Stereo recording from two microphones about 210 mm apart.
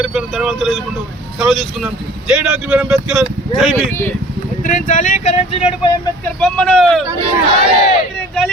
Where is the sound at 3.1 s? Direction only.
Centre (ahead or behind).